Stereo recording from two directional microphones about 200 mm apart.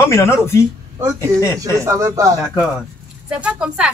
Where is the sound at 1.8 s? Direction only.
15° right (ahead or behind).